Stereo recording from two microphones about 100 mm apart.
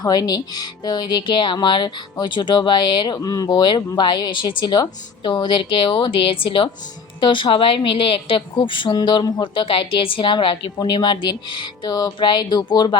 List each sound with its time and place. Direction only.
0.0 s speech: 45° left (ahead or behind)
3.2 s a woman's voice: 40° left (ahead or behind)